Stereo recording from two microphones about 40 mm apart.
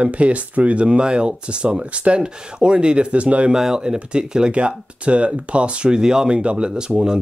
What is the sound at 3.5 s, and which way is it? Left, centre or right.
Speech, centre.